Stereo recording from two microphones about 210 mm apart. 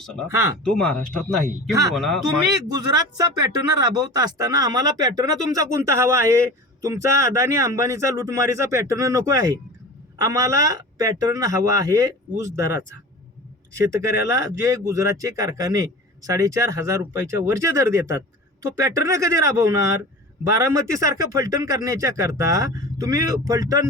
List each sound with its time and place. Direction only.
0.0 s speech: centre (ahead or behind)
2.6 s speech: 20° right (ahead or behind)
14.0 s speech: 15° right (ahead or behind)